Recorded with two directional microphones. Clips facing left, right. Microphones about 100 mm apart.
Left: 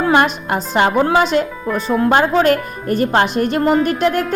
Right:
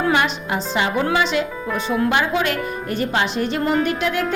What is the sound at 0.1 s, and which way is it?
Speech, 50° left (ahead or behind).